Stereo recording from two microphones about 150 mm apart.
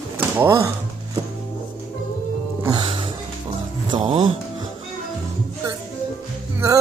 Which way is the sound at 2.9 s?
35° right (ahead or behind).